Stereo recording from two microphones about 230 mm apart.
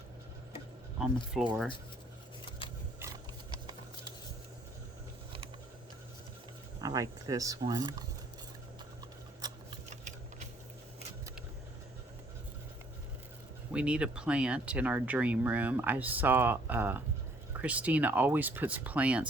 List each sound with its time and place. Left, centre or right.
0.9 s speech: centre
6.8 s speech: centre
9.9 s a sound: right
13.7 s speech: centre